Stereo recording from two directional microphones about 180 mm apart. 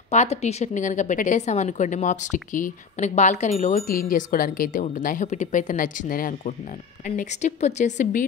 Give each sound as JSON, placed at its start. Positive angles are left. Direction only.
{"t": 0.1, "sound": "a woman's voice", "side_deg": 40}